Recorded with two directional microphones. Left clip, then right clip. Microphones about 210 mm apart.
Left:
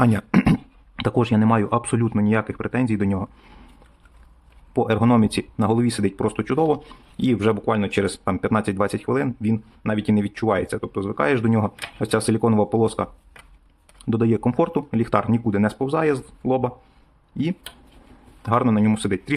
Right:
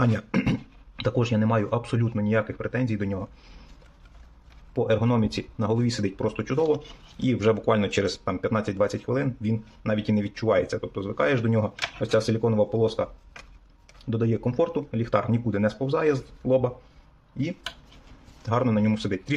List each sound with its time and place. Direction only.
0.0 s a sound: 25° left (ahead or behind)
0.9 s speech: 25° left (ahead or behind)
4.7 s speech: 25° left (ahead or behind)
18.4 s speech: 25° left (ahead or behind)